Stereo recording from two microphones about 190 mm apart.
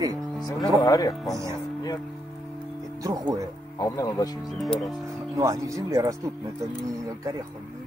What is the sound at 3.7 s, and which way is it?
Speech, 20° left (ahead or behind).